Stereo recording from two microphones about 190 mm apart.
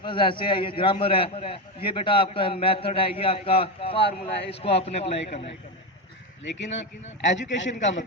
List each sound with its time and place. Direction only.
0.0 s a man's voice: 25° left (ahead or behind)
6.5 s a man's voice: 70° left (ahead or behind)